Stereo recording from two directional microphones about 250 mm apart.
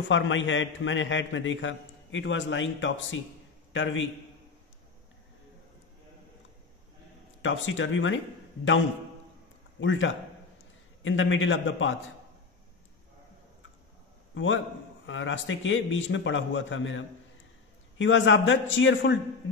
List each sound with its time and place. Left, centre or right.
0.1 s a man's voice: left
7.4 s a man's voice: left
9.8 s a man's voice: left
14.3 s a man's voice: left